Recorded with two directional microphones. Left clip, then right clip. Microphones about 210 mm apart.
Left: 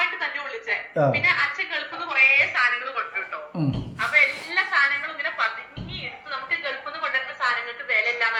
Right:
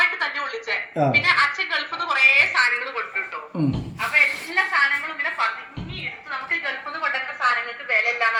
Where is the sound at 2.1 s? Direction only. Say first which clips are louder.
Right 2 dB; 25° right (ahead or behind).